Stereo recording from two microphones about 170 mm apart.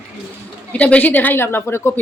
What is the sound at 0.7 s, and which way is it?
A woman's voice, 5° left (ahead or behind).